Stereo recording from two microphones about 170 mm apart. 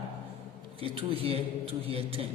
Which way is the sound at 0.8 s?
30° right (ahead or behind).